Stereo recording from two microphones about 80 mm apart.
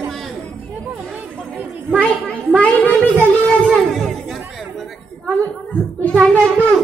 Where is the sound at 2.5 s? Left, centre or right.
Centre.